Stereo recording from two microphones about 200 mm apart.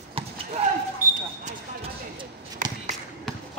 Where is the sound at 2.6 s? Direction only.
40° right (ahead or behind).